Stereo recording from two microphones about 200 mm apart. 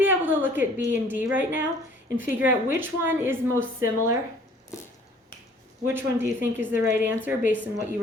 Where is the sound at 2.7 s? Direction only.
10° right (ahead or behind).